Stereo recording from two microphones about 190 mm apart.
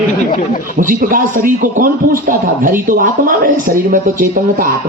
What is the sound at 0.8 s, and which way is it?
A man's voice, 45° right (ahead or behind).